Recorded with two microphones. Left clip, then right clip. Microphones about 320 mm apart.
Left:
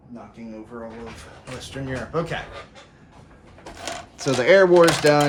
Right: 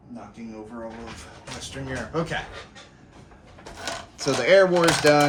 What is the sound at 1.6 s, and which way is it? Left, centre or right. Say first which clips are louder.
Speech: left 2 dB; centre.